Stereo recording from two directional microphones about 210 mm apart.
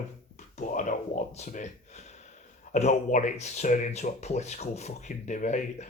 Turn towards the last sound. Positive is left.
turn(degrees=35)  # may be behind; listen again after turning